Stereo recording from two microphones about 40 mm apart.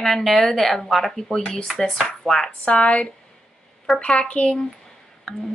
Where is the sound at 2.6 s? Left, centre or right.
Left.